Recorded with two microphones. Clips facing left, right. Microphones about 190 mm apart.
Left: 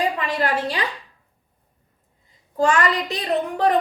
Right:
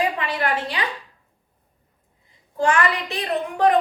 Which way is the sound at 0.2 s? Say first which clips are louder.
Left 2 dB; 40° left (ahead or behind).